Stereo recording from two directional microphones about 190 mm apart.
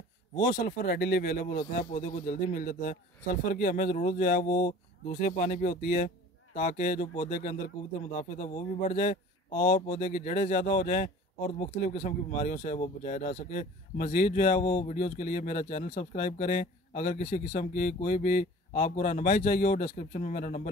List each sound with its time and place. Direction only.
0.4 s speech: 45° left (ahead or behind)